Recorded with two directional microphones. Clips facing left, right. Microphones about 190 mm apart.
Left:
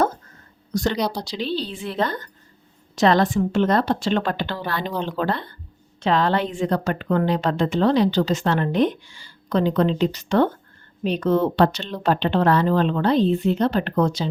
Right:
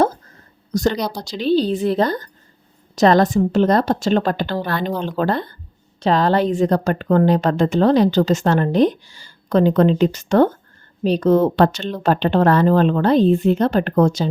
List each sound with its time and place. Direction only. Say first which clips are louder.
0.7 s a woman's voice: right 3 dB; 40° right (ahead or behind)